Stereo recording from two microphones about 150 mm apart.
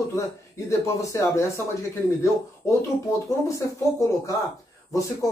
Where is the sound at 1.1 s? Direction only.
20° left (ahead or behind).